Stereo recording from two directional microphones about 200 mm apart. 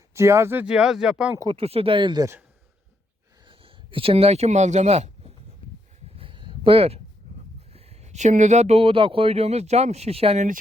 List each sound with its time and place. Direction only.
0.1 s speech: 15° right (ahead or behind)
1.4 s speech: 25° right (ahead or behind)
3.4 s speech: 25° right (ahead or behind)
6.1 s a sound: 25° right (ahead or behind)
7.7 s speech: 30° right (ahead or behind)